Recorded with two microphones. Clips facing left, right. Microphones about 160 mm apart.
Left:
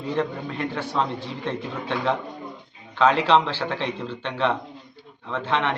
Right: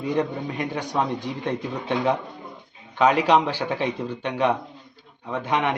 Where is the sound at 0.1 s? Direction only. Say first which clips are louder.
Right 1 dB; 15° right (ahead or behind).